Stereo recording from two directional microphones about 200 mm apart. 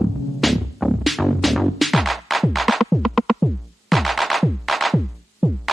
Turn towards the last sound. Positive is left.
turn(degrees=0)  # may be behind; listen again after turning